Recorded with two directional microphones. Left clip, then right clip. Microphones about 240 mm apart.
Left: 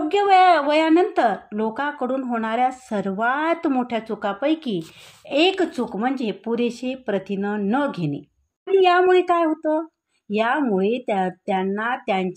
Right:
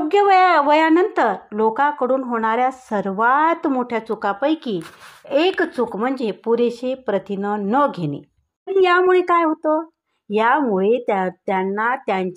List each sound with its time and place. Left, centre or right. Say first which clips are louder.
0.1 s a woman's voice: right 1 dB; centre